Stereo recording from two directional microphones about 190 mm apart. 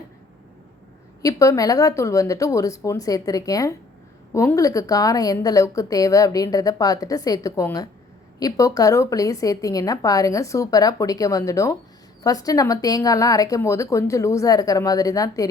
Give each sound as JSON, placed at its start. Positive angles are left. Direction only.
{"t": 1.2, "sound": "a woman's voice", "side_deg": 15}